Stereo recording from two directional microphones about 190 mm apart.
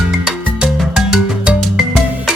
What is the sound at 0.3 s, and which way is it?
Music, 5° right (ahead or behind).